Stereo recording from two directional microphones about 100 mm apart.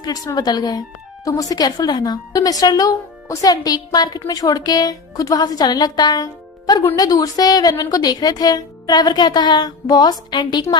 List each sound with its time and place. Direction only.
0.0 s a woman's voice: 40° left (ahead or behind)